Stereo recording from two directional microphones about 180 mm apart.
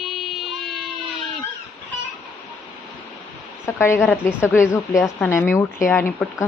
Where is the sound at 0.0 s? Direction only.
Centre (ahead or behind).